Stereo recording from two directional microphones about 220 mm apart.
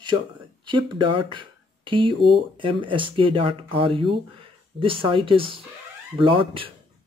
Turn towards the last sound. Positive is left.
turn(degrees=-25)  # may be behind; listen again after turning